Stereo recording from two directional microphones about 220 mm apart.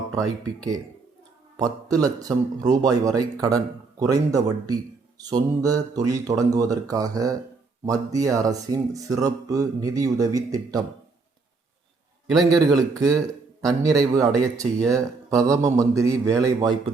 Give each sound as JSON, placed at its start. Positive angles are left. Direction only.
{"t": 0.1, "sound": "a man's voice", "side_deg": -15}
{"t": 12.3, "sound": "a man's voice", "side_deg": 0}
{"t": 13.6, "sound": "a man's voice", "side_deg": -15}